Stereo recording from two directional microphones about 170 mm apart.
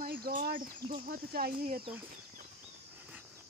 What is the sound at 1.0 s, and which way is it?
Speech, 65° right (ahead or behind).